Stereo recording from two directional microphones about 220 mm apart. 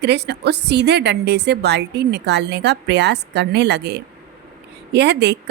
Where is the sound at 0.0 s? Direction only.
50° right (ahead or behind).